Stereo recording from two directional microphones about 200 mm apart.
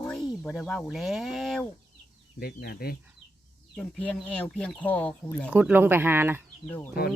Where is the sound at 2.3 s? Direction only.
50° left (ahead or behind).